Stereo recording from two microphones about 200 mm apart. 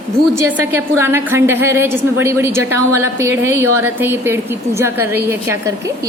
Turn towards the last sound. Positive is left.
turn(degrees=-10)  # may be behind; listen again after turning